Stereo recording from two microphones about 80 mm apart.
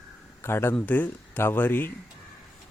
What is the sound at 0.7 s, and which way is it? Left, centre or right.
A man's voice, left.